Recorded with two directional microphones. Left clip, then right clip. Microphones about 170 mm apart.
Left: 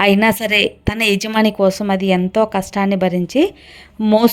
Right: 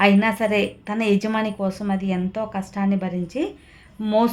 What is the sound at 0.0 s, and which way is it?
A woman's voice, 45° left (ahead or behind).